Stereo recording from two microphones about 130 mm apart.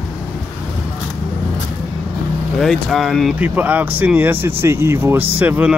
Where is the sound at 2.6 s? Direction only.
Centre (ahead or behind).